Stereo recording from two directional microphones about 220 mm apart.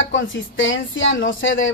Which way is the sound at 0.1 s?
60° left (ahead or behind).